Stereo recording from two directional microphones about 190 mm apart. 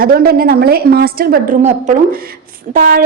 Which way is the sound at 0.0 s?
50° right (ahead or behind).